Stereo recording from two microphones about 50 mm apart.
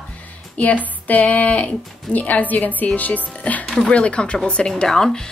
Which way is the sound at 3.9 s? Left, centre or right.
Left.